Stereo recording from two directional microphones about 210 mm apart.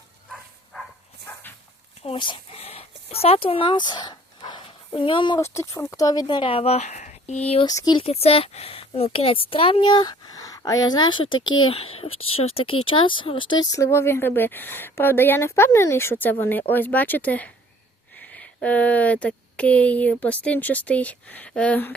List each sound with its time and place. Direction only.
0.3 s a sound: centre (ahead or behind)
2.0 s speech: 25° left (ahead or behind)
7.7 s a woman's voice: 20° left (ahead or behind)